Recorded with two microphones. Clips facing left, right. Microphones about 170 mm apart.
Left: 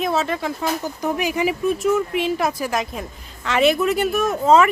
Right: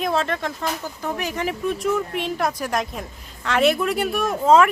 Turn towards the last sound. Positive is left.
turn(degrees=0)  # may be behind; listen again after turning